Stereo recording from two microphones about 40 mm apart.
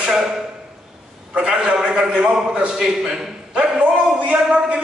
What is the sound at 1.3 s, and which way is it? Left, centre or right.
A man's voice, right.